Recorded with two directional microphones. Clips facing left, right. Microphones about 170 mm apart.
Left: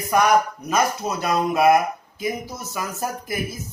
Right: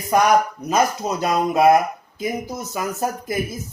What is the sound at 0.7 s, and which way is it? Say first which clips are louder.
Speech: right 2 dB; 25° right (ahead or behind).